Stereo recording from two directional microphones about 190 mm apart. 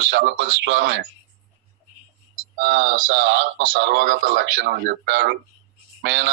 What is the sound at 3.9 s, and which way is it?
Speech, 50° right (ahead or behind).